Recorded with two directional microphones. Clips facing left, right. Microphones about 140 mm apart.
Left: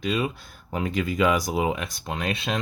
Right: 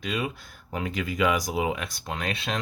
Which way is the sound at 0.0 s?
25° left (ahead or behind).